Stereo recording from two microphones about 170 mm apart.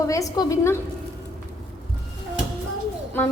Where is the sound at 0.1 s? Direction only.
20° left (ahead or behind).